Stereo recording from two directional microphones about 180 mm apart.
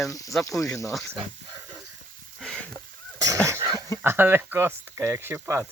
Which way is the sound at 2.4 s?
5° left (ahead or behind).